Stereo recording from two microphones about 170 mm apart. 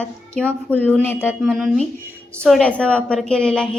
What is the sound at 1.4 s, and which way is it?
A woman's voice, centre (ahead or behind).